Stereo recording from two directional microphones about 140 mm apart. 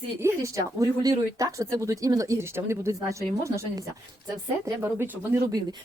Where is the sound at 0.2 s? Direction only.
20° right (ahead or behind).